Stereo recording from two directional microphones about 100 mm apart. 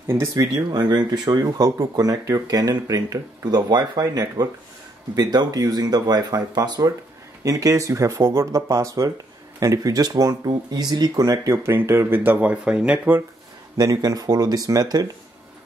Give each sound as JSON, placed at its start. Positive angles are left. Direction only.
{"t": 0.0, "sound": "speech", "side_deg": -25}
{"t": 0.4, "sound": "speech", "side_deg": -45}
{"t": 13.7, "sound": "speech", "side_deg": -40}